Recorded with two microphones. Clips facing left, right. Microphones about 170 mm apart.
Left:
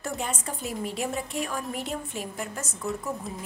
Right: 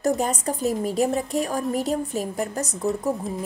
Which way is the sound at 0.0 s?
40° right (ahead or behind).